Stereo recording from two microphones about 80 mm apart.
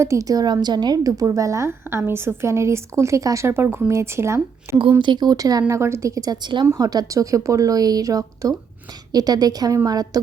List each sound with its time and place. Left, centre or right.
0.0 s a woman's voice: right
4.9 s speech: right
5.8 s a woman's voice: right